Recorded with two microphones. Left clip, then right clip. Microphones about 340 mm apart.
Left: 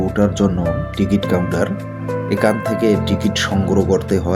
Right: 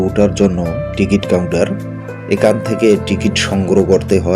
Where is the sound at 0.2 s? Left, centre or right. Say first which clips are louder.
Right 4 dB; left.